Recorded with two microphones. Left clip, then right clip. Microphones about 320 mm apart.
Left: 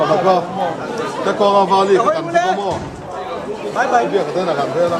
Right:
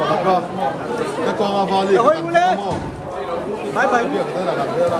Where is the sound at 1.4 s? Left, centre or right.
Left.